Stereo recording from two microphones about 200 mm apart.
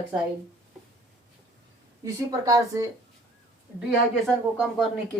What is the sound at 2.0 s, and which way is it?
Speech, 15° right (ahead or behind).